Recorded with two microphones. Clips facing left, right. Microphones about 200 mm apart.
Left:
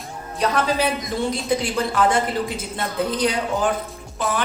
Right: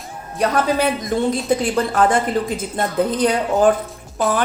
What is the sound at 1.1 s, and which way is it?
Speech, 50° right (ahead or behind).